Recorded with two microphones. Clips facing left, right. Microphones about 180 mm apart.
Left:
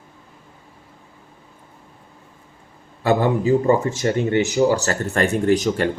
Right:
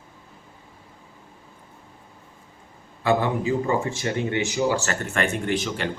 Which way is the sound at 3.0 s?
40° left (ahead or behind).